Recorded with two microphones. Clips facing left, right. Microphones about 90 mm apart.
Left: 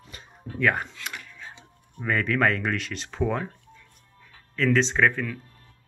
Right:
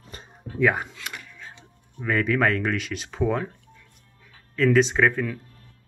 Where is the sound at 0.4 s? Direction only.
10° right (ahead or behind).